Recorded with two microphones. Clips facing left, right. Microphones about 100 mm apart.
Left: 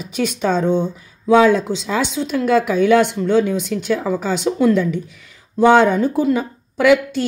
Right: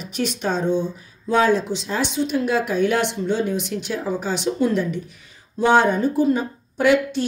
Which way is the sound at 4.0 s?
90° left.